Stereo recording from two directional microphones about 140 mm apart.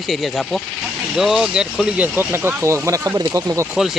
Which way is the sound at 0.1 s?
Centre (ahead or behind).